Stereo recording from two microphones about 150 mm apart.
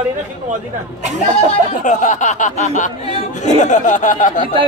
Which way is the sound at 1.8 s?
55° left (ahead or behind).